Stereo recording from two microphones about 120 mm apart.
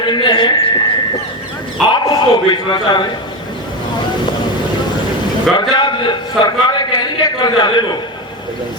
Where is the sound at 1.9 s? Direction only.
35° left (ahead or behind).